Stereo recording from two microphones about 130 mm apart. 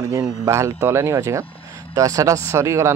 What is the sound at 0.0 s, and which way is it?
Speech, 25° right (ahead or behind).